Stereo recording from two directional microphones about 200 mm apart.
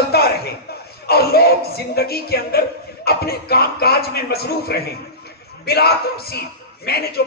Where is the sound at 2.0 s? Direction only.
50° left (ahead or behind).